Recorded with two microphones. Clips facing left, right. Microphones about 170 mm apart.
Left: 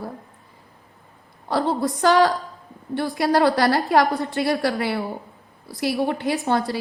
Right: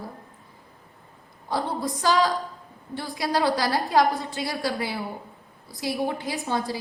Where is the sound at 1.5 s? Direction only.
65° left (ahead or behind).